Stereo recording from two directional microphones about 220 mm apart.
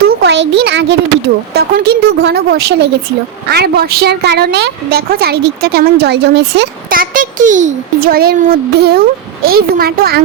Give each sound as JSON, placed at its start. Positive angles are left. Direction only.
{"t": 0.2, "sound": "a woman's voice", "side_deg": -50}